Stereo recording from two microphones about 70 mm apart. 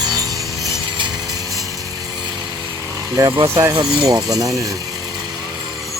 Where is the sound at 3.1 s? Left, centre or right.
Right.